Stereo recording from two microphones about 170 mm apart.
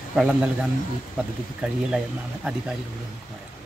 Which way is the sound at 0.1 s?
5° right (ahead or behind).